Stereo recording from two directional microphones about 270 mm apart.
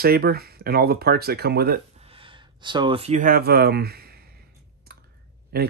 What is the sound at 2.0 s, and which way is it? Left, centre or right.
Speech, centre.